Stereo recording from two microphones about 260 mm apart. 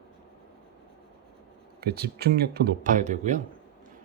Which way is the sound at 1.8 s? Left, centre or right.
Right.